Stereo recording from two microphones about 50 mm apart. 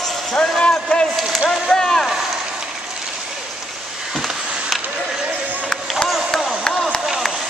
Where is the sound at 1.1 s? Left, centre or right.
Centre.